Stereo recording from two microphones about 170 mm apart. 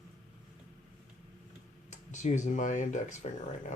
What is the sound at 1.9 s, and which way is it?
Speech, 45° left (ahead or behind).